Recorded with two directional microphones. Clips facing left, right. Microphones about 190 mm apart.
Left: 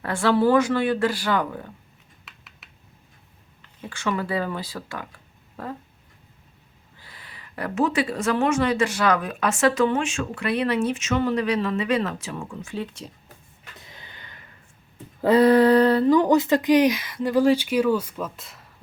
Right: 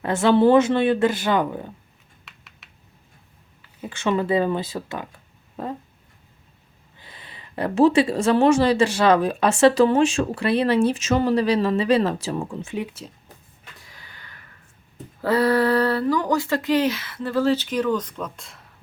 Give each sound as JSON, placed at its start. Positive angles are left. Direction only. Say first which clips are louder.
{"t": 0.0, "sound": "speech", "louder": "right 3 dB", "side_deg": -20}
{"t": 2.2, "sound": "typing", "louder": "even", "side_deg": 0}
{"t": 3.8, "sound": "speech", "louder": "right 5 dB", "side_deg": -25}
{"t": 7.0, "sound": "speech", "louder": "right 2 dB", "side_deg": -20}
{"t": 13.0, "sound": "speech", "louder": "even", "side_deg": -5}
{"t": 13.7, "sound": "a sound", "louder": "left 2 dB", "side_deg": 20}
{"t": 15.2, "sound": "speech", "louder": "left 4 dB", "side_deg": 20}